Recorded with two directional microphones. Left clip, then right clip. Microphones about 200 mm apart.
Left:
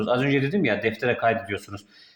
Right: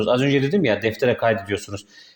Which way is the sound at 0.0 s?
40° right (ahead or behind).